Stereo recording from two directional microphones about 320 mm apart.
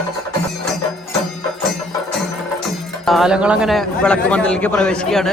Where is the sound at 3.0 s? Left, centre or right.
Centre.